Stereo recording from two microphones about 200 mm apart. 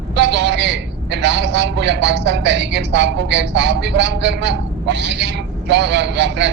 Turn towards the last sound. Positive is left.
turn(degrees=-60)  # may be behind; listen again after turning